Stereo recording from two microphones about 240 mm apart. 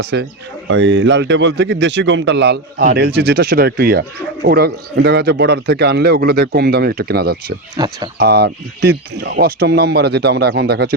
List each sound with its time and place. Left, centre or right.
0.0 s a man's voice: right
7.8 s speech: centre
8.2 s a man's voice: right